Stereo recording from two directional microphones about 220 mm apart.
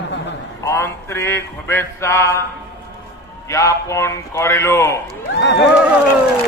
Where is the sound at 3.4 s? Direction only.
15° left (ahead or behind).